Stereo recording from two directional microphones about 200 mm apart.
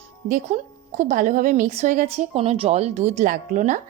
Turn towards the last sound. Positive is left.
turn(degrees=-40)  # may be behind; listen again after turning